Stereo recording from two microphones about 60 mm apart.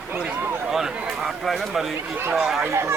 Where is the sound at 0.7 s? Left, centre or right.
Centre.